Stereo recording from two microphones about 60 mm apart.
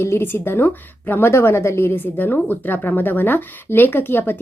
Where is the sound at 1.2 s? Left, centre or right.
Left.